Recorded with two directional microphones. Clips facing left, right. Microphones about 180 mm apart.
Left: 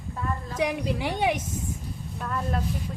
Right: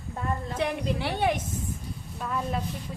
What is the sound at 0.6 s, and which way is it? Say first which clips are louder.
Speech: left 3 dB; 10° left (ahead or behind).